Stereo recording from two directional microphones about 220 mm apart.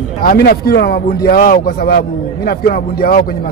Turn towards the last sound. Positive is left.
turn(degrees=45)  # may be behind; listen again after turning